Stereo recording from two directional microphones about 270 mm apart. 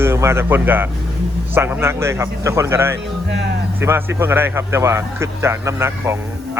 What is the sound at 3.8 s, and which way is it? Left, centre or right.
Speech, centre.